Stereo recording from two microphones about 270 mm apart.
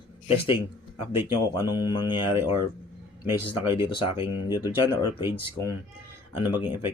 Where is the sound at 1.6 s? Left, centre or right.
Centre.